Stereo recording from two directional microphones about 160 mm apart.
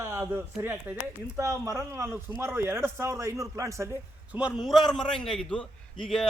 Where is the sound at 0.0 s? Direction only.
20° right (ahead or behind).